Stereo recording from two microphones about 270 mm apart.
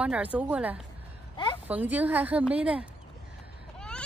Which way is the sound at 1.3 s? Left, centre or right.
Centre.